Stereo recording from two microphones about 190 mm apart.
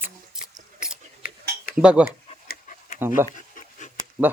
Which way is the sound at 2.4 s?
45° left (ahead or behind).